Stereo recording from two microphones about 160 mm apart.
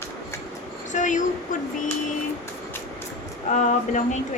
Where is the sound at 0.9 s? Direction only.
50° left (ahead or behind).